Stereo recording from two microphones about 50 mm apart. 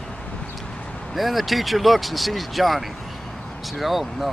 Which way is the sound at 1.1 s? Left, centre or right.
Centre.